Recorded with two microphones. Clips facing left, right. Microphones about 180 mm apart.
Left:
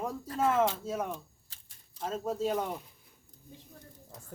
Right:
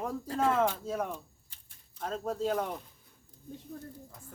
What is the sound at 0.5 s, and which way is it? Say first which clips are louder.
A man's voice: even; 5° left (ahead or behind).